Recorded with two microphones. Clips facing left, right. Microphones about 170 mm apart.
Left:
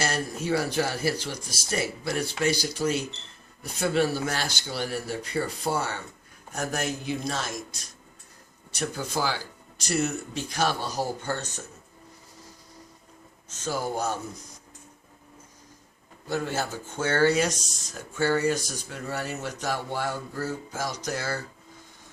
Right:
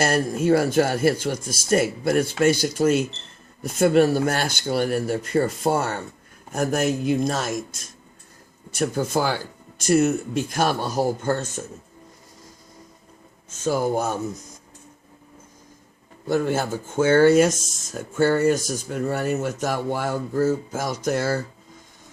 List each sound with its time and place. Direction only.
0.0 s speech: 55° right (ahead or behind)
13.7 s speech: 50° right (ahead or behind)
16.2 s speech: 50° right (ahead or behind)